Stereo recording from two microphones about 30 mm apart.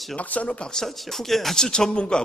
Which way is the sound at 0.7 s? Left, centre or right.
Centre.